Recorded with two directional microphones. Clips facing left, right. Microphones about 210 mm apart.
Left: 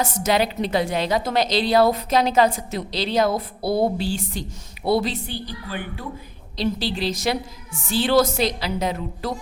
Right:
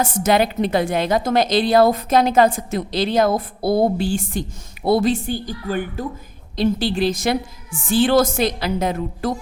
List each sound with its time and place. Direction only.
0.0 s a woman's voice: 50° right (ahead or behind)